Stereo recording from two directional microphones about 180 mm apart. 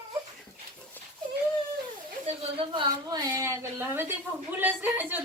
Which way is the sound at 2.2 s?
30° right (ahead or behind).